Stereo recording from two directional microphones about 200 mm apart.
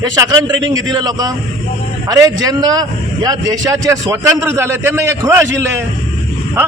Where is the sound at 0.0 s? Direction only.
20° right (ahead or behind).